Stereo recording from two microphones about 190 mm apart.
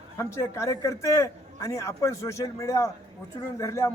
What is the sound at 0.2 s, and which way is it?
A man's voice, 15° left (ahead or behind).